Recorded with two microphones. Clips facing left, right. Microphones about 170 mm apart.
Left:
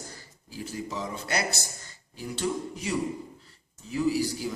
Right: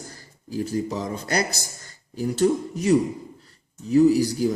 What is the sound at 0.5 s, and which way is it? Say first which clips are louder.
A man's voice: right 9 dB; 40° right (ahead or behind).